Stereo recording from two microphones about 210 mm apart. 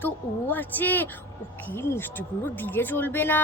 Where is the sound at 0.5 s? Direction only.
10° left (ahead or behind).